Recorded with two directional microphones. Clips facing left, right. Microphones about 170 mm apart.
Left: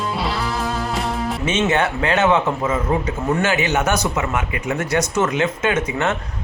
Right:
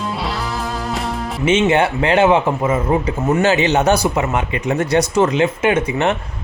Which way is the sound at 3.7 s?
35° right (ahead or behind).